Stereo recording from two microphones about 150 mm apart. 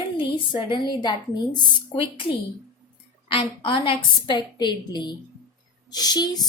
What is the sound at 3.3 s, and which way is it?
A woman's voice, 35° left (ahead or behind).